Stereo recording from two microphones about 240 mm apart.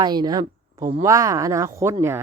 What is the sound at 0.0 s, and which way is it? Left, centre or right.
A woman's voice, centre.